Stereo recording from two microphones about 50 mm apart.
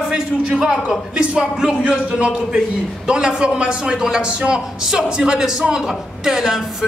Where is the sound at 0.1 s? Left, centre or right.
Centre.